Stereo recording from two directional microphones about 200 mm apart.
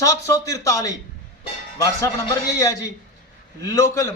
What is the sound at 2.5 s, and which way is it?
A man's voice, 15° left (ahead or behind).